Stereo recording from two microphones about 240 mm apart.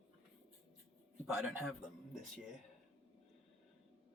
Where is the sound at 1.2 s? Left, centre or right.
Centre.